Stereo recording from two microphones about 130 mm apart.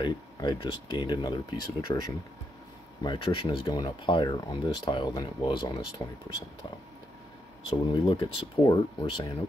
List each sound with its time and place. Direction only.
0.0 s speech: 35° left (ahead or behind)
7.9 s speech: 40° left (ahead or behind)